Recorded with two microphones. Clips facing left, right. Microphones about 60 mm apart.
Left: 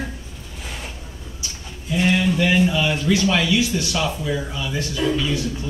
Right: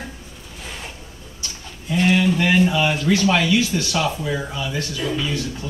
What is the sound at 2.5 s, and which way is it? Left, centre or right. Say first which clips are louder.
Speech: right 1 dB; centre.